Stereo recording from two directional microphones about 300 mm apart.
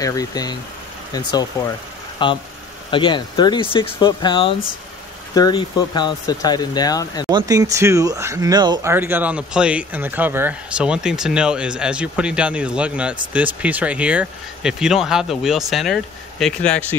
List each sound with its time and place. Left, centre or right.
0.0 s speech: centre
7.2 s speech: centre